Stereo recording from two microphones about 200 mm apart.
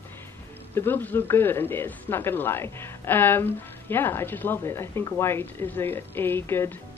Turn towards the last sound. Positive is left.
turn(degrees=10)  # may be behind; listen again after turning